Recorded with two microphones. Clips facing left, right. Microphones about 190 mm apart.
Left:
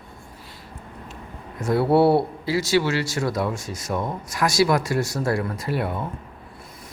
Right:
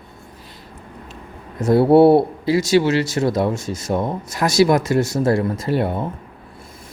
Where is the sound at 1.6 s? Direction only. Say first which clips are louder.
Right 7 dB; 40° right (ahead or behind).